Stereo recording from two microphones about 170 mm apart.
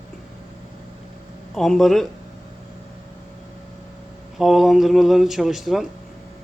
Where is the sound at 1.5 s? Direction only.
Centre (ahead or behind).